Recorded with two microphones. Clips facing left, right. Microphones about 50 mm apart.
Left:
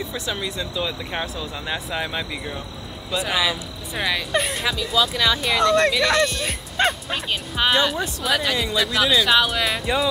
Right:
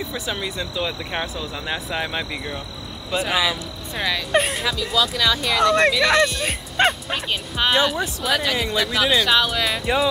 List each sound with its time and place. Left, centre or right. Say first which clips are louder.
0.0 s speech: even; centre
4.6 s speech: even; centre
5.4 s speech: right 1 dB; centre